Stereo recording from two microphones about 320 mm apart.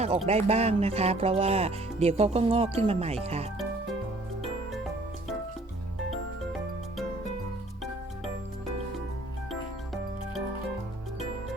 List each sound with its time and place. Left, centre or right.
0.3 s speech: centre
9.5 s music: centre